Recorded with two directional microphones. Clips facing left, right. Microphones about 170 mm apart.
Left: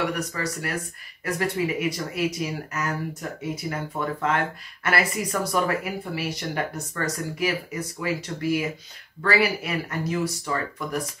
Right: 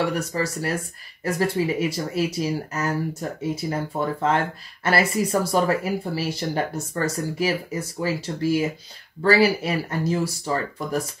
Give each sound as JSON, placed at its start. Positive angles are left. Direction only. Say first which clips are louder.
{"t": 0.3, "sound": "speech", "louder": "right 4 dB", "side_deg": -30}